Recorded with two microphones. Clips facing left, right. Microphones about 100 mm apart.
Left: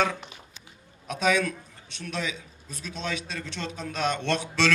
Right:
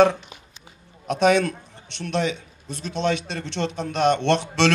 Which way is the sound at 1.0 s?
70° right (ahead or behind).